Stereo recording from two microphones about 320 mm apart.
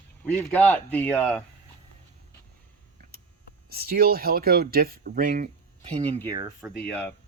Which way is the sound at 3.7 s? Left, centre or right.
Right.